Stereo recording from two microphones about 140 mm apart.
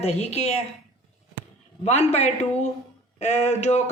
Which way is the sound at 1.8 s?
50° left (ahead or behind).